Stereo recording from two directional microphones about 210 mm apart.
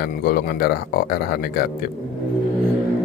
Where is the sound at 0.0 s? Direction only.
45° left (ahead or behind).